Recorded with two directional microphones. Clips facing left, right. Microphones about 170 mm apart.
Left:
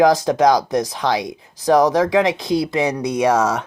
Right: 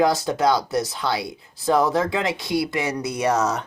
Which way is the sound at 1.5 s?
90° left.